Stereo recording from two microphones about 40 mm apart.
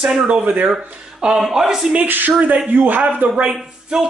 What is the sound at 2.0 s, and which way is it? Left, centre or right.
Speech, right.